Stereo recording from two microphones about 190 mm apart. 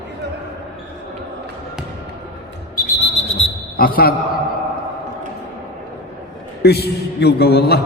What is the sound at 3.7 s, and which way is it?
Speech, 50° left (ahead or behind).